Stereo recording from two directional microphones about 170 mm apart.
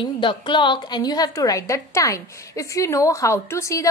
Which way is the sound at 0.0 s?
30° left (ahead or behind).